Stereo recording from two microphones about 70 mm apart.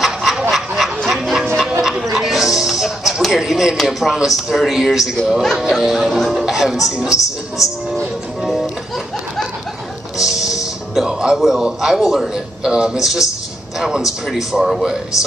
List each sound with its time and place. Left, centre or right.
0.0 s chicken: centre
1.8 s chatter: centre
2.1 s music: centre
3.7 s speech: centre
7.2 s music: left
10.1 s a man's voice: centre